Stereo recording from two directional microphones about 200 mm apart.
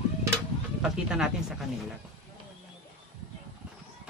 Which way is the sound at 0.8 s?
5° right (ahead or behind).